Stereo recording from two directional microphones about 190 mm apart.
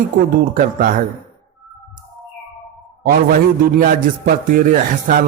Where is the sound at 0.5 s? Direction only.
45° right (ahead or behind).